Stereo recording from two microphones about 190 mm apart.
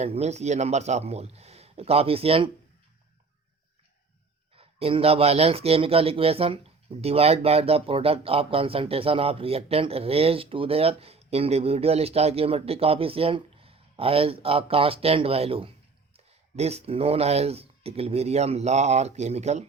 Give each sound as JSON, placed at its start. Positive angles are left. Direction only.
{"t": 0.0, "sound": "speech", "side_deg": -35}
{"t": 4.5, "sound": "speech", "side_deg": -30}